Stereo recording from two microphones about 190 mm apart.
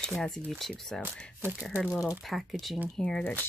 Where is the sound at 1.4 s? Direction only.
10° right (ahead or behind).